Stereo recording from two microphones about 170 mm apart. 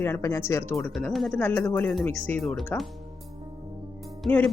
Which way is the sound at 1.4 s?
10° left (ahead or behind).